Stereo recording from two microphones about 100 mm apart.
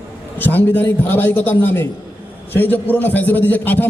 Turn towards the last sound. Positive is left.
turn(degrees=20)  # may be behind; listen again after turning